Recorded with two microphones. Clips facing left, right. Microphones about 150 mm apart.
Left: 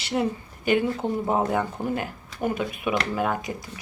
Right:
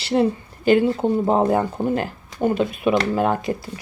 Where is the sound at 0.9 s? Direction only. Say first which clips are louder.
Right 6 dB; 25° right (ahead or behind).